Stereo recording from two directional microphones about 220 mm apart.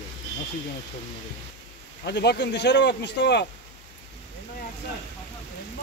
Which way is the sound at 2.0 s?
50° left (ahead or behind).